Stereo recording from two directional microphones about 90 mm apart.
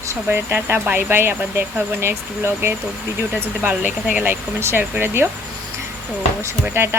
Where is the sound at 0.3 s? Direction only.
25° right (ahead or behind).